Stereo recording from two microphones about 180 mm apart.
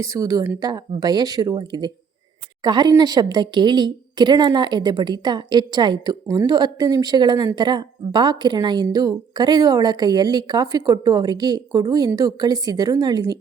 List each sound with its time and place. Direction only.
0.0 s a woman's voice: 20° right (ahead or behind)